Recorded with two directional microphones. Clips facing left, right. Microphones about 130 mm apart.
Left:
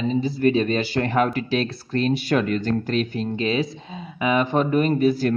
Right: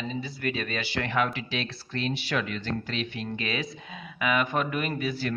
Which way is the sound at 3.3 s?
30° left (ahead or behind).